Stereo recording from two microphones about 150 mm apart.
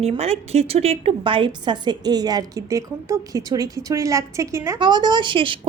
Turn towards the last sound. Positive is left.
turn(degrees=-35)  # may be behind; listen again after turning